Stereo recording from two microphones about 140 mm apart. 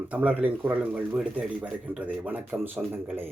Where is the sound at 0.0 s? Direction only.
10° right (ahead or behind).